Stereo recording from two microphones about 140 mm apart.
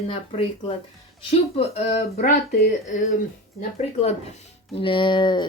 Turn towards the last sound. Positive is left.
turn(degrees=35)  # may be behind; listen again after turning